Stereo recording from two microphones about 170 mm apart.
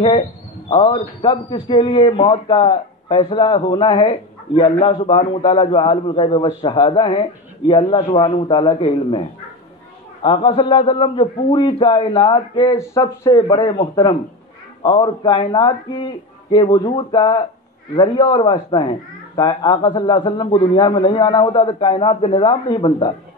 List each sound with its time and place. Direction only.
0.7 s a man's voice: 30° left (ahead or behind)
10.2 s a man's voice: 30° left (ahead or behind)